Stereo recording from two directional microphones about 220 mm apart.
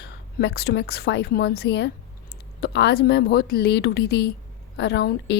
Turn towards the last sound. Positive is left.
turn(degrees=50)  # may be behind; listen again after turning